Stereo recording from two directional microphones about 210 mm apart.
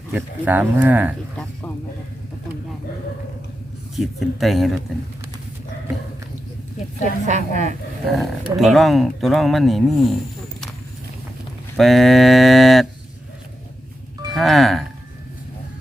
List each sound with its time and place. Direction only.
0.1 s speech: 10° right (ahead or behind)
3.9 s speech: centre (ahead or behind)
7.0 s a woman's voice: 35° right (ahead or behind)
8.1 s speech: centre (ahead or behind)
11.8 s speech: centre (ahead or behind)
14.3 s speech: centre (ahead or behind)